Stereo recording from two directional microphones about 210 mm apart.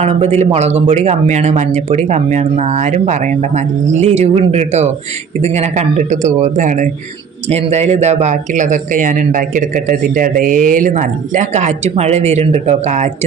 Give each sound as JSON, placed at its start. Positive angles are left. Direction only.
{"t": 0.0, "sound": "speech", "side_deg": -30}